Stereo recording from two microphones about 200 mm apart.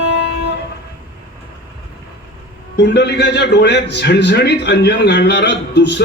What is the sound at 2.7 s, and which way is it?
A man's voice, 60° left (ahead or behind).